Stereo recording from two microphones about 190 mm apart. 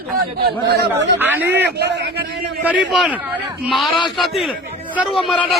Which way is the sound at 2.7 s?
Centre (ahead or behind).